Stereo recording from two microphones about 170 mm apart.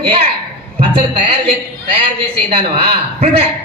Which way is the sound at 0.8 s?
35° right (ahead or behind).